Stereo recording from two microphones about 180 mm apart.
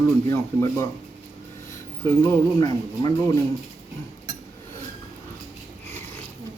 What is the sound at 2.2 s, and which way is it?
Speech, 15° left (ahead or behind).